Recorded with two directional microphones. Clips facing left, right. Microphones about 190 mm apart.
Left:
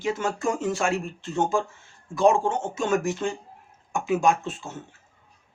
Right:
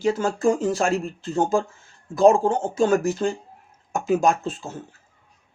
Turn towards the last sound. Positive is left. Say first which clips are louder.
# right 2 dB
turn(degrees=-40)  # may be behind; listen again after turning